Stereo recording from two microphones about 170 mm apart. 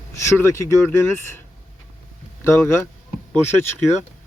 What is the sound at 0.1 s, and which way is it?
Speech, 15° left (ahead or behind).